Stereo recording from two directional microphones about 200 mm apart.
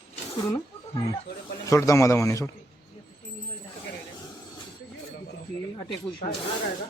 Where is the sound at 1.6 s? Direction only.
15° left (ahead or behind).